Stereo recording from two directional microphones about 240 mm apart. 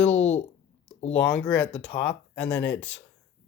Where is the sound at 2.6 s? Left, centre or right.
Left.